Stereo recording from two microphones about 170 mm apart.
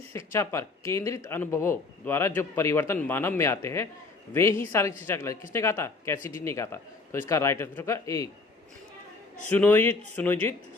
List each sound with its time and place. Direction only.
0.1 s speech: 15° left (ahead or behind)
9.5 s speech: 10° left (ahead or behind)